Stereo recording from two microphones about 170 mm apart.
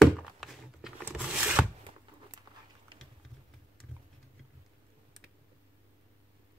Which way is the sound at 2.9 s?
25° right (ahead or behind).